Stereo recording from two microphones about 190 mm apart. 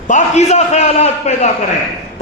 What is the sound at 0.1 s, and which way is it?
A man's voice, 35° left (ahead or behind).